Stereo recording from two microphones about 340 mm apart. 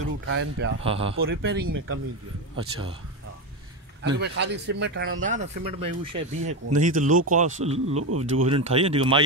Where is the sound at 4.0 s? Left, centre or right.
Right.